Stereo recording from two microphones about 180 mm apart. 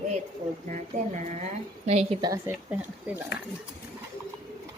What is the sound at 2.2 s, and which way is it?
Speech, 20° right (ahead or behind).